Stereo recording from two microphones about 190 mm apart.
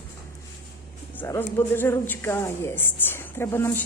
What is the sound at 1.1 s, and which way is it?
A woman's voice, 15° left (ahead or behind).